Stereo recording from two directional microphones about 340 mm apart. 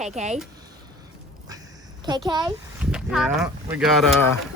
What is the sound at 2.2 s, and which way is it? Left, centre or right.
Speech, centre.